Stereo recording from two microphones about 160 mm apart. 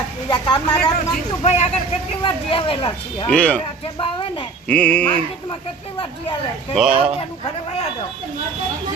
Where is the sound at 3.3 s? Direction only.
5° left (ahead or behind).